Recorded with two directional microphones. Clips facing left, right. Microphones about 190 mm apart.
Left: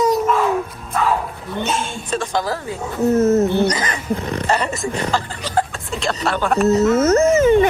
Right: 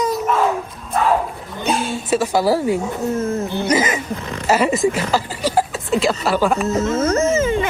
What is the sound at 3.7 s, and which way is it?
A woman's voice, 10° right (ahead or behind).